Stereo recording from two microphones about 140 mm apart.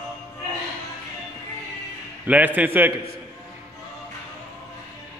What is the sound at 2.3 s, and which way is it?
Speech, 10° right (ahead or behind).